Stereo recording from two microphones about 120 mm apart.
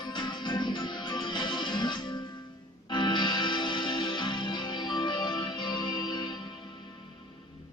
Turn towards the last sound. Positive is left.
turn(degrees=40)  # may be behind; listen again after turning